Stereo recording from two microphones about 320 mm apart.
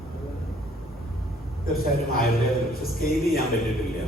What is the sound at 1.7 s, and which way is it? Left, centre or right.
Speech, left.